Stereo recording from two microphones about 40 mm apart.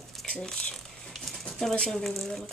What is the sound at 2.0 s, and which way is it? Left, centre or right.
Speech, centre.